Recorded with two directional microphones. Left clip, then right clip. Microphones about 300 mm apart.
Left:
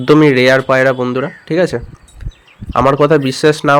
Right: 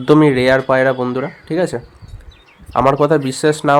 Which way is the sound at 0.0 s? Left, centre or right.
Centre.